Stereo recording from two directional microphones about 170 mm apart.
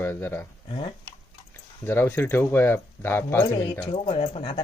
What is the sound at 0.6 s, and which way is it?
Speech, 35° left (ahead or behind).